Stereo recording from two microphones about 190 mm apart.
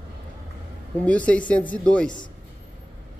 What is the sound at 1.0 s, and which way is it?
Speech, 5° left (ahead or behind).